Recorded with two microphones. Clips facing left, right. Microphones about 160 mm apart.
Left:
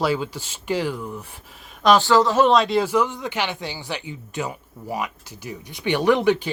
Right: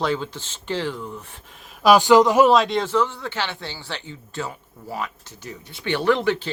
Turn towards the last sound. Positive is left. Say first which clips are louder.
# left 2 dB
turn(degrees=15)  # may be behind; listen again after turning